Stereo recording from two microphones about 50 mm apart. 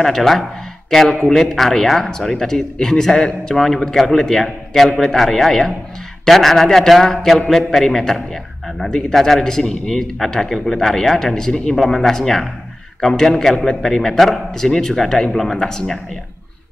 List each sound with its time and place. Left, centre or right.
0.0 s a man's voice: centre
14.5 s a man's voice: centre